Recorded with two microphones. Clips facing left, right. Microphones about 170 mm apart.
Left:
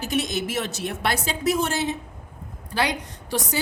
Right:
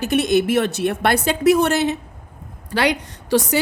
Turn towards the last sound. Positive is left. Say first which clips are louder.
# right 9 dB
turn(degrees=-75)  # may be behind; listen again after turning